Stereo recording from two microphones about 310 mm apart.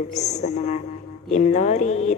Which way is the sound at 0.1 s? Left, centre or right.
Left.